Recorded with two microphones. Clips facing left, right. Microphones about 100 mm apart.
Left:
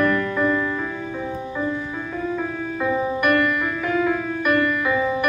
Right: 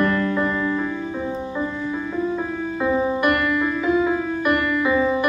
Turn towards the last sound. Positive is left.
turn(degrees=-20)  # may be behind; listen again after turning